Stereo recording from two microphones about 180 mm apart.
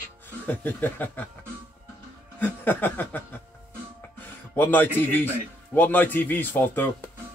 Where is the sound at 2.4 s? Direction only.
10° left (ahead or behind).